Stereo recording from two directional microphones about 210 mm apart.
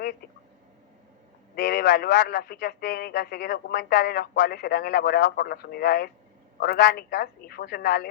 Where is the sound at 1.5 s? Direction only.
45° left (ahead or behind).